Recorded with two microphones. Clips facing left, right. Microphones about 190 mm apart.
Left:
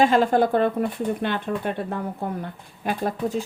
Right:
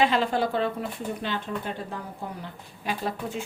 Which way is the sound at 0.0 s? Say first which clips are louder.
Left 5 dB; 50° left (ahead or behind).